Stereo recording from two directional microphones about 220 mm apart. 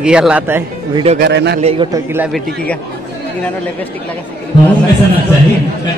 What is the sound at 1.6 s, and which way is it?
Speech, 30° right (ahead or behind).